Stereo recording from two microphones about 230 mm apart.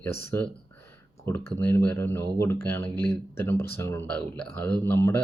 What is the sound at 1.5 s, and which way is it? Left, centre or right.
Speech, centre.